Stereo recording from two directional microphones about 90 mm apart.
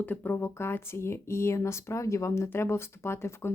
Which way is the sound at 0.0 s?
20° left (ahead or behind).